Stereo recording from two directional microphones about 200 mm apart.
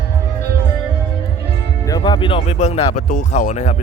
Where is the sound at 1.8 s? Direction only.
20° left (ahead or behind).